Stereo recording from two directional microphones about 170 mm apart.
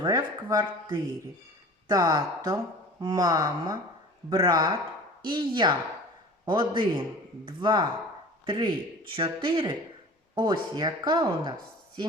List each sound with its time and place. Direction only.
0.0 s speech: 20° right (ahead or behind)